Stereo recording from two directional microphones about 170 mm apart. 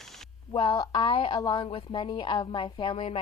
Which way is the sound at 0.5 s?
25° left (ahead or behind).